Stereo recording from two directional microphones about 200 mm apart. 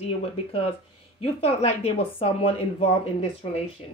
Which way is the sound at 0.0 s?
30° left (ahead or behind).